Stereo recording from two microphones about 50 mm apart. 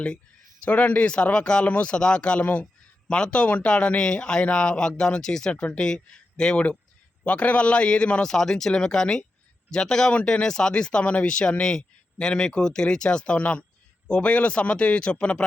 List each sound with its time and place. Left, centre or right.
0.6 s speech: left
2.4 s speech: left
3.1 s speech: centre
8.3 s speech: centre
10.1 s speech: left